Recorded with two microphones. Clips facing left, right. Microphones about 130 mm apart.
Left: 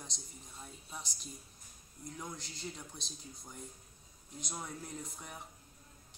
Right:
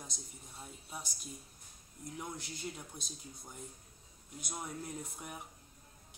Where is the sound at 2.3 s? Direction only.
55° right (ahead or behind).